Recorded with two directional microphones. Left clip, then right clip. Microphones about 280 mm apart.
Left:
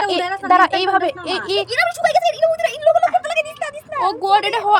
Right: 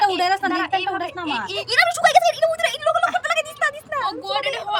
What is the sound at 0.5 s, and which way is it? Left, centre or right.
Speech, centre.